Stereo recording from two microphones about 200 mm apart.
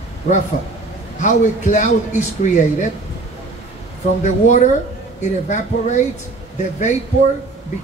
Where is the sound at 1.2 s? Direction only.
35° left (ahead or behind).